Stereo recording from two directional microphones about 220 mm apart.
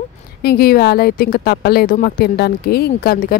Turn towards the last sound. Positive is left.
turn(degrees=45)  # may be behind; listen again after turning